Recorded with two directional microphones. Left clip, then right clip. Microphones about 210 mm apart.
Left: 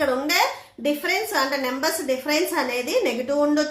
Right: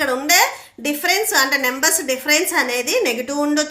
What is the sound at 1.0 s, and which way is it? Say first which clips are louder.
A woman's voice: right 8 dB; 40° right (ahead or behind).